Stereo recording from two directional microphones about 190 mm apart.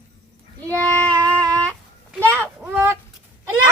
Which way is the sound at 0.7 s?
10° left (ahead or behind).